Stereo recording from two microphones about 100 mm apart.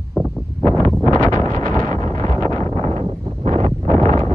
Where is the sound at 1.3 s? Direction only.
40° left (ahead or behind).